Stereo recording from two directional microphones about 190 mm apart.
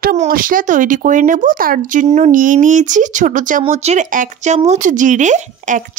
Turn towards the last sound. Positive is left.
turn(degrees=-40)  # may be behind; listen again after turning